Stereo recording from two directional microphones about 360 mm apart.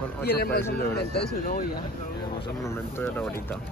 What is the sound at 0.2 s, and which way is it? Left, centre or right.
Speech, left.